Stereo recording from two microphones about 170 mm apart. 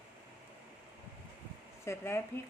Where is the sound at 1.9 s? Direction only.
15° left (ahead or behind).